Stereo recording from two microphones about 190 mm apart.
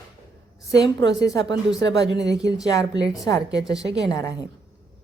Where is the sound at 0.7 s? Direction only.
20° left (ahead or behind).